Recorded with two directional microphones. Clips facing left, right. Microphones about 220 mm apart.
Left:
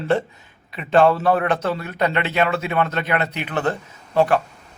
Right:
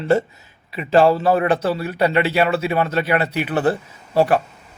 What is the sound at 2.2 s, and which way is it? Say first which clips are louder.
Speech: right 5 dB; 10° right (ahead or behind).